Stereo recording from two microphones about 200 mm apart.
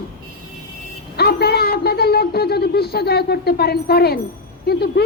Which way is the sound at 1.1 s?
50° left (ahead or behind).